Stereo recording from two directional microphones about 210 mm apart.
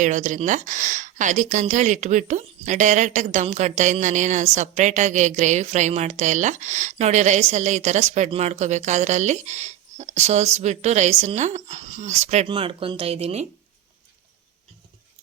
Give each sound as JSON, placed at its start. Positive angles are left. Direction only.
{"t": 0.0, "sound": "a woman's voice", "side_deg": -35}